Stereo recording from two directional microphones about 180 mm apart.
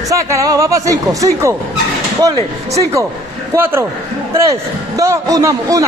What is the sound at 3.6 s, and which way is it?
Speech, 10° right (ahead or behind).